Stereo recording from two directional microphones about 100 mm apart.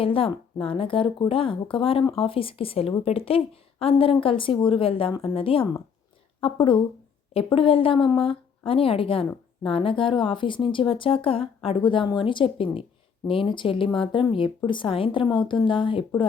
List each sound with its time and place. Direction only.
0.0 s speech: 65° left (ahead or behind)
3.0 s speech: 85° left; by 16.2 s 60° left (ahead or behind)